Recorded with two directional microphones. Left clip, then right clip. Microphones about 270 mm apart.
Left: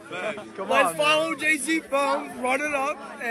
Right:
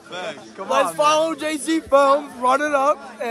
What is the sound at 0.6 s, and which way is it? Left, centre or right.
Speech, centre.